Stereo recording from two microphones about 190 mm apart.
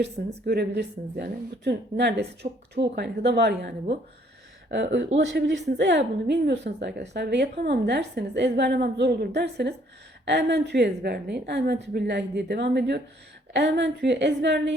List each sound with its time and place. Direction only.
0.0 s a woman's voice: 60° right (ahead or behind)
4.7 s a woman's voice: 70° right (ahead or behind)